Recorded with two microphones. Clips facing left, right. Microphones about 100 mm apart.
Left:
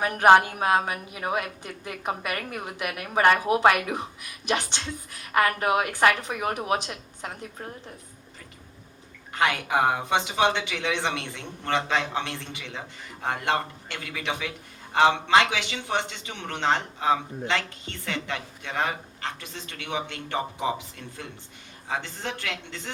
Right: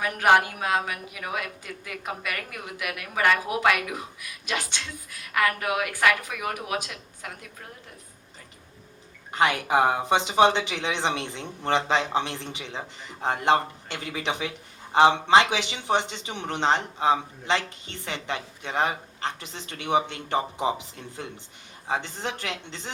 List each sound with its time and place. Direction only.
0.0 s a woman's voice: 30° left (ahead or behind)
10.1 s a man's voice: 20° right (ahead or behind)